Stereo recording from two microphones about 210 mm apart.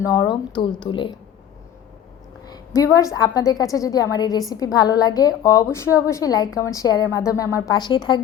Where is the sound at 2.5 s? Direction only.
15° left (ahead or behind).